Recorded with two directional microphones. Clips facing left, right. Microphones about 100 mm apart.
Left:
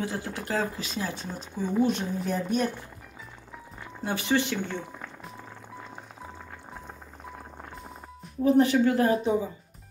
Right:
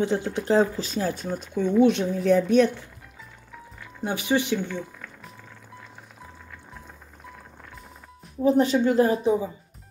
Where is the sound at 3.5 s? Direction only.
25° left (ahead or behind).